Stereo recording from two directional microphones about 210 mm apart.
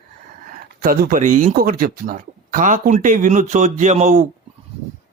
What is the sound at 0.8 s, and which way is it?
Speech, 45° right (ahead or behind).